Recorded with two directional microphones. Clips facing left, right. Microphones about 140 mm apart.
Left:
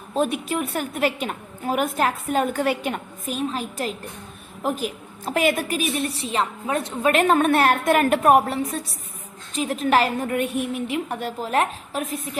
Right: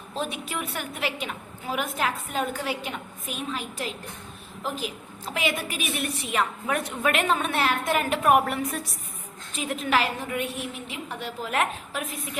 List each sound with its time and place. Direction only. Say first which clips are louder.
0.1 s a woman's voice: left 8 dB; 50° left (ahead or behind)
8.2 s a woman's voice: left 4 dB; 35° left (ahead or behind)